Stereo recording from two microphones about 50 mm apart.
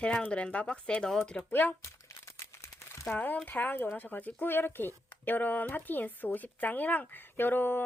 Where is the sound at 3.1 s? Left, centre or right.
Left.